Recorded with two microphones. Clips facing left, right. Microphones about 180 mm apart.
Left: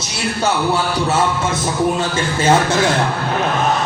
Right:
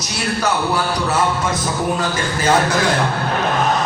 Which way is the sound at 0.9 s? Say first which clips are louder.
Left 1 dB; 25° left (ahead or behind).